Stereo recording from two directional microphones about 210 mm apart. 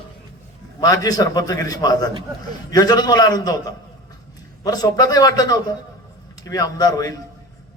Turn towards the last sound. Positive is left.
turn(degrees=15)  # may be behind; listen again after turning